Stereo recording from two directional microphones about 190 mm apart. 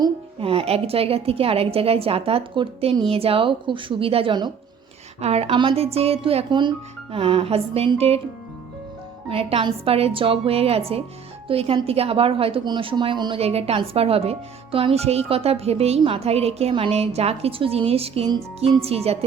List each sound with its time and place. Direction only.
0.0 s a woman's voice: 30° right (ahead or behind)
9.3 s a woman's voice: 30° right (ahead or behind)